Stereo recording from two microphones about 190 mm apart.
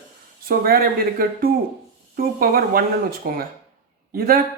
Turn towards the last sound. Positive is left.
turn(degrees=-50)  # may be behind; listen again after turning